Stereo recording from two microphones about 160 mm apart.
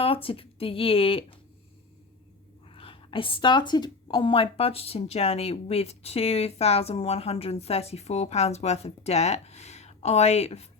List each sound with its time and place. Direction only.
0.0 s a woman's voice: 35° left (ahead or behind)
2.7 s a woman's voice: 35° left (ahead or behind)